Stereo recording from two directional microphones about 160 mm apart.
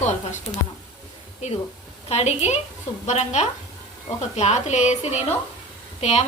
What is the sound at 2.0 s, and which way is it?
A woman's voice, 40° left (ahead or behind).